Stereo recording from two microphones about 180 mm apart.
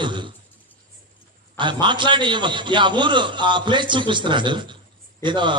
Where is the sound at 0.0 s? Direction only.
25° right (ahead or behind).